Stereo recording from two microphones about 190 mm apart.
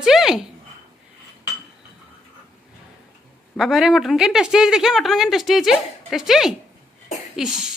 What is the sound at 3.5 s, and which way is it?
Speech, centre (ahead or behind).